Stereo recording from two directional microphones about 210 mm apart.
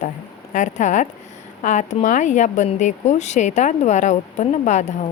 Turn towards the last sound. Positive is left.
turn(degrees=35)  # may be behind; listen again after turning